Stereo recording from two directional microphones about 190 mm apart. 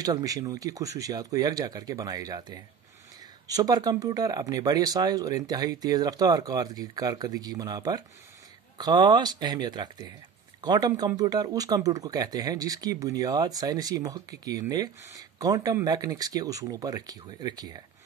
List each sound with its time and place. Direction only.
0.0 s speech: 20° right (ahead or behind)